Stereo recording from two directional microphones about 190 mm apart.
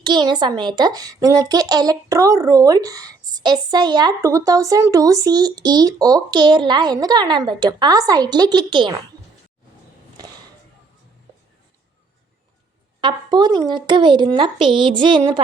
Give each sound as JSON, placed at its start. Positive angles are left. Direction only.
{"t": 0.0, "sound": "speech", "side_deg": -25}
{"t": 13.0, "sound": "speech", "side_deg": -25}